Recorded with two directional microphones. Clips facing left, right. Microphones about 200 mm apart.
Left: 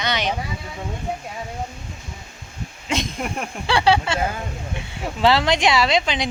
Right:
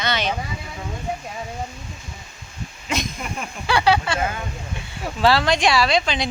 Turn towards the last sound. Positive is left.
turn(degrees=20)  # may be behind; listen again after turning